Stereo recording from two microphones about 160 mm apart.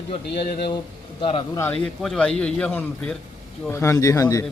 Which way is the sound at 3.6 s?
15° left (ahead or behind).